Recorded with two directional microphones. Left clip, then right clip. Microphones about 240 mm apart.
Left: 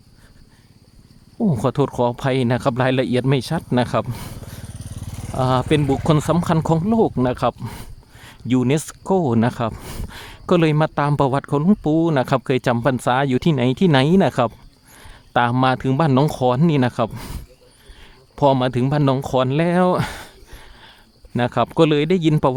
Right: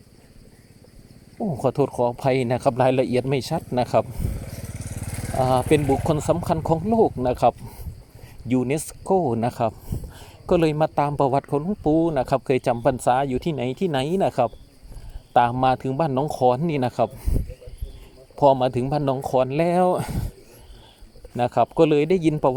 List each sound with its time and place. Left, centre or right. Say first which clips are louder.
1.5 s speech: left 1 dB; centre
4.9 s vehicle: right 3 dB; centre
5.4 s speech: left 1 dB; centre
18.6 s speech: left 2 dB; centre
21.3 s speech: left 1 dB; centre